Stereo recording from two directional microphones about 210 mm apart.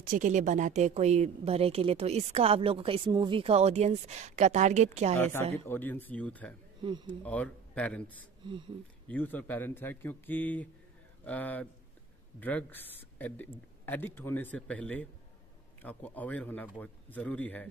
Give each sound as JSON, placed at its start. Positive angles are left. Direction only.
{"t": 0.0, "sound": "speech", "side_deg": -40}
{"t": 5.1, "sound": "speech", "side_deg": 10}
{"t": 9.0, "sound": "speech", "side_deg": 10}